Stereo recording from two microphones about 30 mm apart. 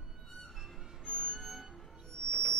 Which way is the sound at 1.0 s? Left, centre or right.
Left.